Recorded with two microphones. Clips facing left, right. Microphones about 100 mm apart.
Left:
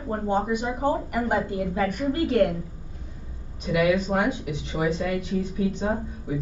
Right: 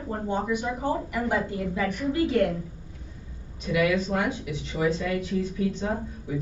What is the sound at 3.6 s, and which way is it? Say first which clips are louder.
Speech: left 1 dB; 55° left (ahead or behind).